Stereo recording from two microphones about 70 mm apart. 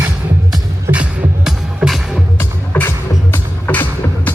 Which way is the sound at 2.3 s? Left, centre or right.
Left.